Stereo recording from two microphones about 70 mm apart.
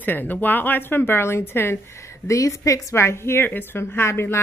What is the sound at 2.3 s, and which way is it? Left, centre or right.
Speech, left.